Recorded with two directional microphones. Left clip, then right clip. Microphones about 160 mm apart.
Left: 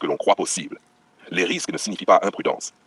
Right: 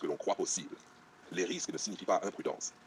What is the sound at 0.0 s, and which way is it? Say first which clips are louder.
Speech: left 14 dB; 55° left (ahead or behind).